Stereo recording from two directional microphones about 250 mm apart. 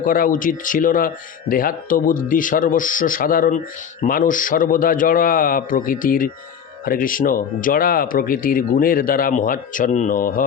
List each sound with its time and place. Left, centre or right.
0.0 s speech: left